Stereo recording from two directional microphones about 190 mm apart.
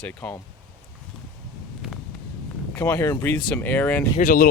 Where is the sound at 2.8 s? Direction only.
10° left (ahead or behind).